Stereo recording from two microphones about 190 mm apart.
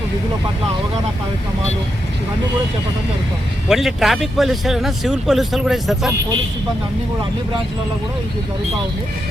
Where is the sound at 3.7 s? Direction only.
Centre (ahead or behind).